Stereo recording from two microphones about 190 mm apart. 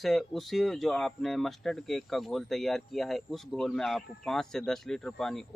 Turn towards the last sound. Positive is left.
turn(degrees=0)  # may be behind; listen again after turning